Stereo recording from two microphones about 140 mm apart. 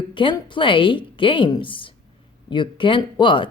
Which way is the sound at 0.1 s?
35° left (ahead or behind).